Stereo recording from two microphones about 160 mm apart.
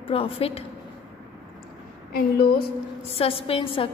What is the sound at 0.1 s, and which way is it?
Speech, 35° left (ahead or behind).